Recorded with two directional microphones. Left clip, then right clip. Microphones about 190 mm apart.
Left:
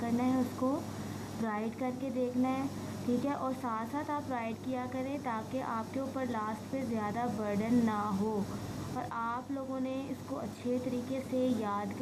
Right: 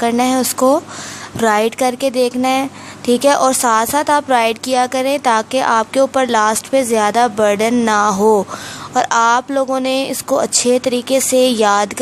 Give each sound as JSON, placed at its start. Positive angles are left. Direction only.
{"t": 0.0, "sound": "a woman's voice", "side_deg": -50}